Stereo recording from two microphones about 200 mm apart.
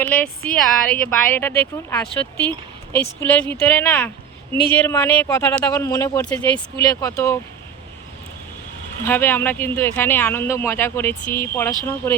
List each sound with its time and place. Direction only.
0.0 s speech: 5° left (ahead or behind)
9.0 s speech: 10° left (ahead or behind)